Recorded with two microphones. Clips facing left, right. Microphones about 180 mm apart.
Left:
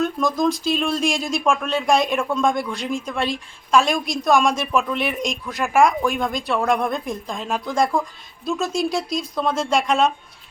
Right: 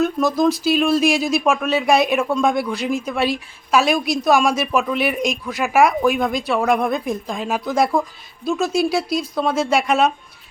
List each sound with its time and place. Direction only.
0.0 s speech: 5° right (ahead or behind)